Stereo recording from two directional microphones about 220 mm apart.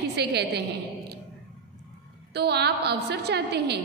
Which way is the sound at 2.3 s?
50° right (ahead or behind).